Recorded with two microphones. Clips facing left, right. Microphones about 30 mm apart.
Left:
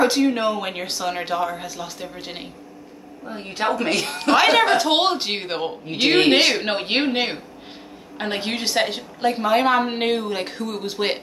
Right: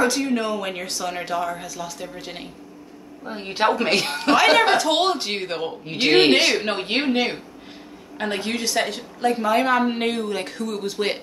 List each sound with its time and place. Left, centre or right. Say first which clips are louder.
0.0 s a woman's voice: left 3 dB; left
3.3 s a man's voice: right 2 dB; centre
4.7 s a woman's voice: left 1 dB; centre
5.9 s speech: left 1 dB; centre
6.3 s a woman's voice: left 1 dB; centre